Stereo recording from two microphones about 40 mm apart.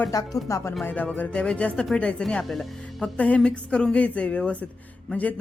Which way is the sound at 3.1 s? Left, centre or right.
Left.